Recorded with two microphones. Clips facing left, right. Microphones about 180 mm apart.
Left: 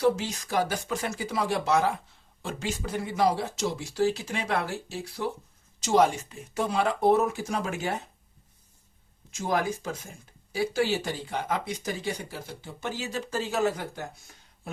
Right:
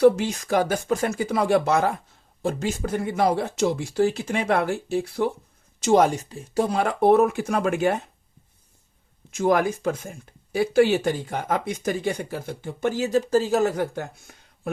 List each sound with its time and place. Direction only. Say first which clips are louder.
0.0 s speech: right 8 dB; 55° right (ahead or behind)
9.3 s speech: right 7 dB; 60° right (ahead or behind)